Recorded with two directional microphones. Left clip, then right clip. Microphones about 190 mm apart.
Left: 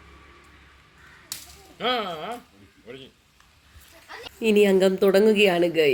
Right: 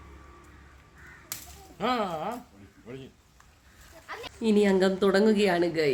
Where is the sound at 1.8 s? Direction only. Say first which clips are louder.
Left 2 dB; 65° right (ahead or behind).